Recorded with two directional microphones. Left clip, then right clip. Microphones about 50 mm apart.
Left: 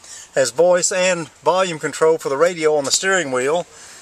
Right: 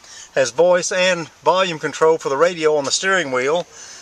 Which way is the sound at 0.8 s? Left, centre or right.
Left.